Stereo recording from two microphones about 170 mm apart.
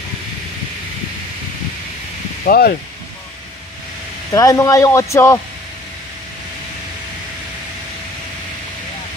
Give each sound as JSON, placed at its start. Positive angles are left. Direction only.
{"t": 2.4, "sound": "speech", "side_deg": 65}
{"t": 4.3, "sound": "speech", "side_deg": 20}